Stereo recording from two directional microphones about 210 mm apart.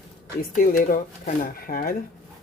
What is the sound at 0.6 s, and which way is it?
Speech, 40° left (ahead or behind).